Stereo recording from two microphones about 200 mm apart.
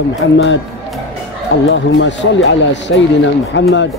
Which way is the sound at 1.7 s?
65° left (ahead or behind).